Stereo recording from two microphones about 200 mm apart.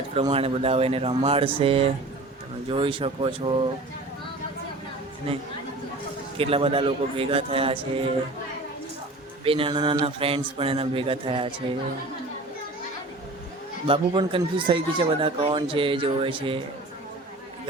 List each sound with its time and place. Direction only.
0.1 s speech: 30° right (ahead or behind)
6.3 s speech: 30° right (ahead or behind)
9.4 s speech: 25° right (ahead or behind)
13.8 s speech: 25° right (ahead or behind)